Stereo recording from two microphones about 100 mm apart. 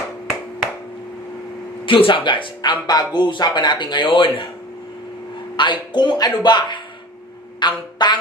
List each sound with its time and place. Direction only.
1.9 s speech: 60° left (ahead or behind)
5.6 s speech: 50° left (ahead or behind)